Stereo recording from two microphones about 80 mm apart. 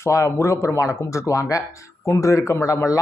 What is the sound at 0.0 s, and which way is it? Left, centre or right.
Speech, left.